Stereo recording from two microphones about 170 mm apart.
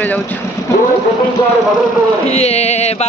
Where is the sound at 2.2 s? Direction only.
40° left (ahead or behind).